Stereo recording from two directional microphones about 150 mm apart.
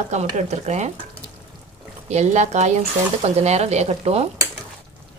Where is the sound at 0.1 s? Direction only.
50° right (ahead or behind).